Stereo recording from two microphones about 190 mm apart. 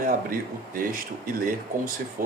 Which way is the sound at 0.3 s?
45° right (ahead or behind).